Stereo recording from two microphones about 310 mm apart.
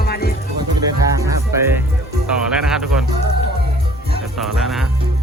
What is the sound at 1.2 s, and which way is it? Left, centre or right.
Music, centre.